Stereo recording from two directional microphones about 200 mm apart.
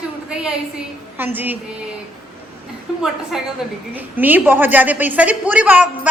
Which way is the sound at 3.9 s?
10° right (ahead or behind).